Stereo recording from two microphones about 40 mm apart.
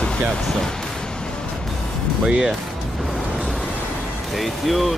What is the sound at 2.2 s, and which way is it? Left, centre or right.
Speech, centre.